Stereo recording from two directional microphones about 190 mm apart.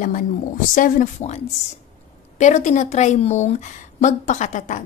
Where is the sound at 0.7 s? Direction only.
45° left (ahead or behind).